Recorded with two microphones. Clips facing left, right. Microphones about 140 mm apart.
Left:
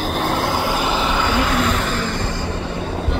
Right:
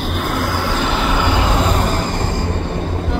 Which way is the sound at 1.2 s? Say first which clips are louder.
Right 1 dB; 20° right (ahead or behind).